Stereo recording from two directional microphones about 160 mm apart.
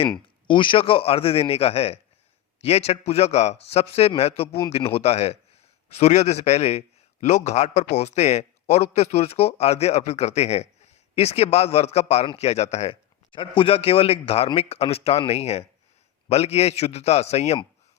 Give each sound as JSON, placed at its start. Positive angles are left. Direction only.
{"t": 0.4, "sound": "a man's voice", "side_deg": 30}